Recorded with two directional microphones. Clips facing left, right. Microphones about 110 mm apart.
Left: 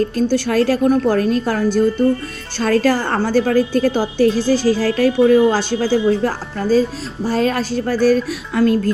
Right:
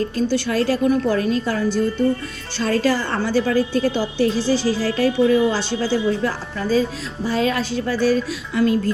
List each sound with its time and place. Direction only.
0.3 s a woman's voice: 45° left (ahead or behind)